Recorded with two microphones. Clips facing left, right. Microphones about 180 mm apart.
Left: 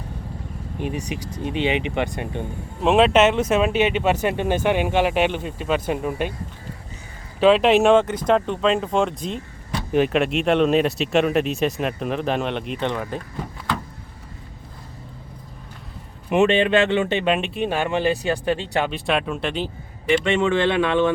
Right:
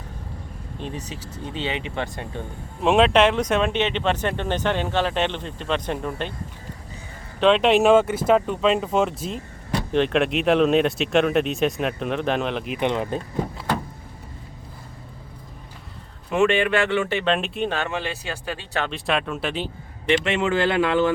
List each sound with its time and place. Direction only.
0.8 s speech: 10° left (ahead or behind)
2.8 s speech: centre (ahead or behind)
7.3 s speech: 5° left (ahead or behind)
12.8 s speech: 20° right (ahead or behind)
16.3 s speech: 20° left (ahead or behind)
17.3 s speech: centre (ahead or behind)
17.8 s speech: 20° left (ahead or behind)
18.9 s speech: centre (ahead or behind)